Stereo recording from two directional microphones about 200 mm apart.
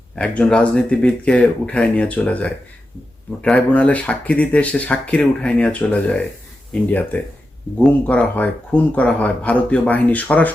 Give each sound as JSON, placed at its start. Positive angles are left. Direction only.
{"t": 0.2, "sound": "speech", "side_deg": 5}